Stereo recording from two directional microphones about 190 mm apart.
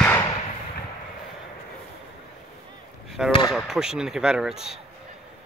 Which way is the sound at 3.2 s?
5° right (ahead or behind).